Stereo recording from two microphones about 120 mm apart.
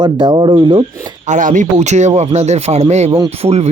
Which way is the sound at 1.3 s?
90° right.